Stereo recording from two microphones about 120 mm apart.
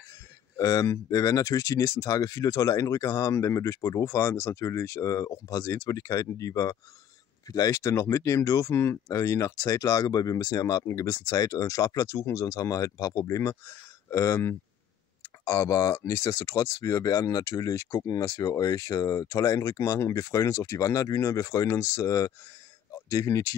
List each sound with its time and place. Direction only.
0.6 s speech: 30° left (ahead or behind)